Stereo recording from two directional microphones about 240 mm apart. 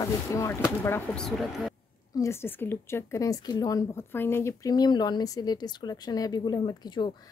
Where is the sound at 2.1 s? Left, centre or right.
Centre.